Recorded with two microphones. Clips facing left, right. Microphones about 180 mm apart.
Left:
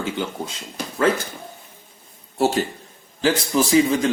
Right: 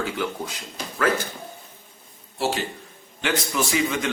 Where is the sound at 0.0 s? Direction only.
25° left (ahead or behind).